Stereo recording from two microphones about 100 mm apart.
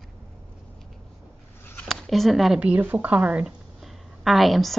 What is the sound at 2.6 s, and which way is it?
Speech, 15° right (ahead or behind).